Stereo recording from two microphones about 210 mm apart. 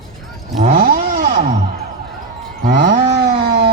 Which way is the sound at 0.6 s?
40° right (ahead or behind).